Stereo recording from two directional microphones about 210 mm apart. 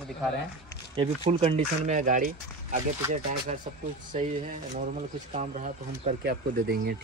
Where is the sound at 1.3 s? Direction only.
30° right (ahead or behind).